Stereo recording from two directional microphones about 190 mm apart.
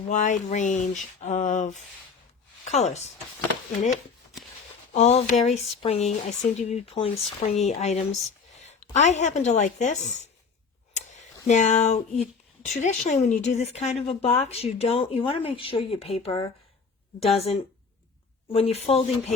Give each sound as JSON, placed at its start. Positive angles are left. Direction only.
{"t": 0.1, "sound": "speech", "side_deg": 40}
{"t": 4.9, "sound": "a woman's voice", "side_deg": 35}
{"t": 10.9, "sound": "a sound", "side_deg": 40}
{"t": 12.6, "sound": "speech", "side_deg": 40}